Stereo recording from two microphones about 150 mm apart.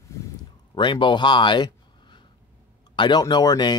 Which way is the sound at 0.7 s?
35° left (ahead or behind).